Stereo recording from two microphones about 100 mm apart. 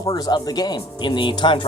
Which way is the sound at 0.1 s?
45° left (ahead or behind).